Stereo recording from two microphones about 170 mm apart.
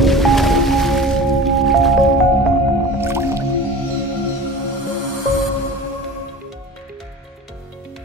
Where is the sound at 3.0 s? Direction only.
15° right (ahead or behind).